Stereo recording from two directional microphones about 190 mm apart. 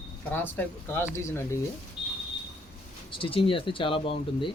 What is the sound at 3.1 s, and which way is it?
Speech, 30° left (ahead or behind).